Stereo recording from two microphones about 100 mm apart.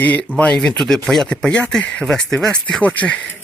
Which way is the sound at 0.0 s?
15° left (ahead or behind).